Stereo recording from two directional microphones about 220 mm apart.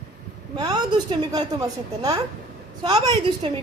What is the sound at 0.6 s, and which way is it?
A woman's voice, 20° right (ahead or behind).